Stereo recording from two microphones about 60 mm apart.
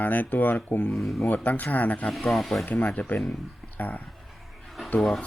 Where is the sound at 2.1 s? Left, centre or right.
Centre.